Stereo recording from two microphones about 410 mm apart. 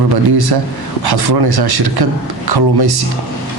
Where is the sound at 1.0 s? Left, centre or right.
Right.